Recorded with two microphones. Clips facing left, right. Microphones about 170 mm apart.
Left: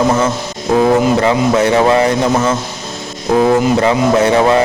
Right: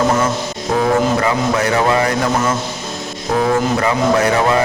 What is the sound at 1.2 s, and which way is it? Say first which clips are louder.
A man's voice: left 5 dB; 25° left (ahead or behind).